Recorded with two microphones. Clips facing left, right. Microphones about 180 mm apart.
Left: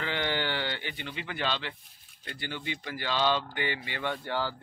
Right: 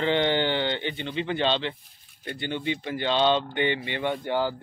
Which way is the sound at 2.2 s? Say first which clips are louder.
Right 8 dB; 25° right (ahead or behind).